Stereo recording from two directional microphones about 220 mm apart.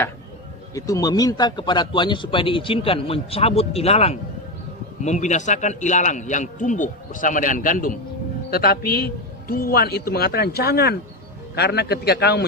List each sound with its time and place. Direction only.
0.7 s a man's voice: 15° left (ahead or behind); by 12.5 s 45° left (ahead or behind)